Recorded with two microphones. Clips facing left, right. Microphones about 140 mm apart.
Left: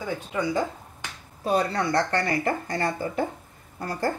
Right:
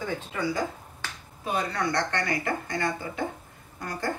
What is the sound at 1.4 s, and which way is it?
Speech, 35° left (ahead or behind).